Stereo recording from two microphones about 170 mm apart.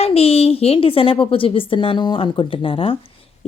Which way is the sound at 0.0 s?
35° left (ahead or behind).